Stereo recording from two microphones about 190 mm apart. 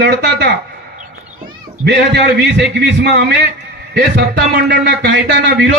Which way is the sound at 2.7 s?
60° right (ahead or behind).